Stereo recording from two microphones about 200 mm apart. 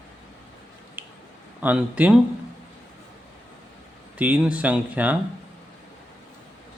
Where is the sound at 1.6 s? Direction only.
10° right (ahead or behind).